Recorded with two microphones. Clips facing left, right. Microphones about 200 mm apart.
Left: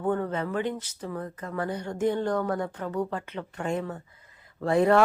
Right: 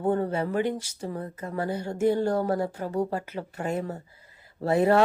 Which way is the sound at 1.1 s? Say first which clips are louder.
Even; 25° right (ahead or behind).